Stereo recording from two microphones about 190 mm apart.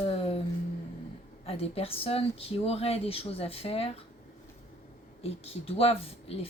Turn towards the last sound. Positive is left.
turn(degrees=30)  # may be behind; listen again after turning